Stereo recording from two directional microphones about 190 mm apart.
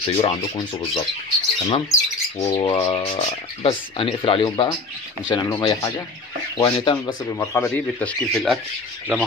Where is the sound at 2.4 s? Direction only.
30° left (ahead or behind).